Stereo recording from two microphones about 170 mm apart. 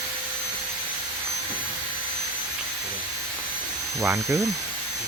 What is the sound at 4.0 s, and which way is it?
Speech, 20° right (ahead or behind).